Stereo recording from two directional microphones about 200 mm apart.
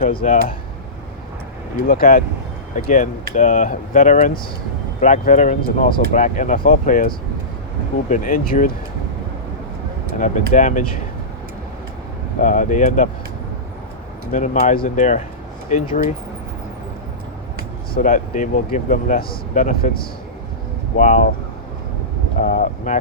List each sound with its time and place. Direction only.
0.0 s speech: 45° left (ahead or behind)
1.9 s speech: 45° left (ahead or behind)
8.1 s speech: 45° left (ahead or behind)
10.2 s speech: 40° left (ahead or behind)
12.4 s speech: 40° left (ahead or behind)
14.3 s speech: 35° left (ahead or behind)
17.9 s speech: 40° left (ahead or behind)
22.4 s speech: 45° left (ahead or behind)